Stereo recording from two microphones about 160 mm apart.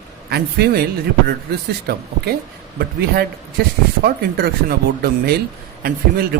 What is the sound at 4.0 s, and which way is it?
A man's voice, 70° right (ahead or behind).